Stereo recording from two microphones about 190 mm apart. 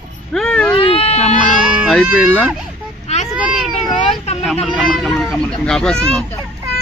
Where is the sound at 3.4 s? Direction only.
5° right (ahead or behind).